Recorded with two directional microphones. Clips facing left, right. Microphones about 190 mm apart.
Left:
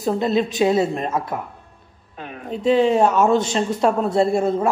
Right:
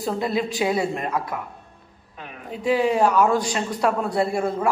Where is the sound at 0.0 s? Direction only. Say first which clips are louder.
Left 4 dB; 20° left (ahead or behind).